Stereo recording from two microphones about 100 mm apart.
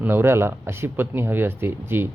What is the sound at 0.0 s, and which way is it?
Speech, 20° right (ahead or behind).